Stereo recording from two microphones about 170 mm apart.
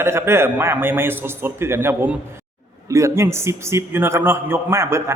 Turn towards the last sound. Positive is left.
turn(degrees=-15)  # may be behind; listen again after turning